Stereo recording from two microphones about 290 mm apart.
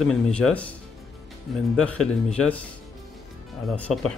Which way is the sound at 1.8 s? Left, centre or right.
Centre.